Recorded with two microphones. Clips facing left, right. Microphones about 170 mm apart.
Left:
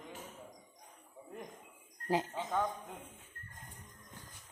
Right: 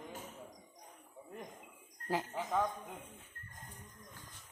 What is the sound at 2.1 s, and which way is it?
Speech, 20° left (ahead or behind).